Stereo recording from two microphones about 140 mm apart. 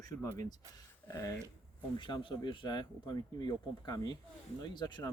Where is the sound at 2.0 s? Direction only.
35° left (ahead or behind).